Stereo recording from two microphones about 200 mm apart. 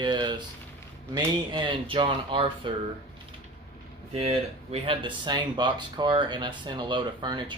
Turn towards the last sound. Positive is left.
turn(degrees=-20)  # may be behind; listen again after turning